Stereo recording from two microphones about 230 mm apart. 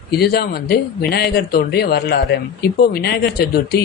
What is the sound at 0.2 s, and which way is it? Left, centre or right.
Speech, left.